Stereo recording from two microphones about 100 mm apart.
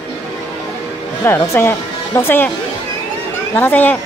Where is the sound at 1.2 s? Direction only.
20° left (ahead or behind).